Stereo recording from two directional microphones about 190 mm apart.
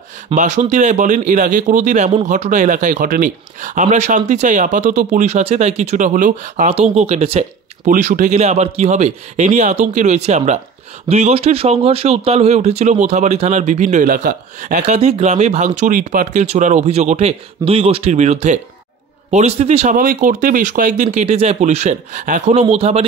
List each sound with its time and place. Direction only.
0.3 s speech: 40° right (ahead or behind)